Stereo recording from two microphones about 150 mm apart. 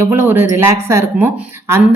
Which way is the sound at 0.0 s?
15° right (ahead or behind).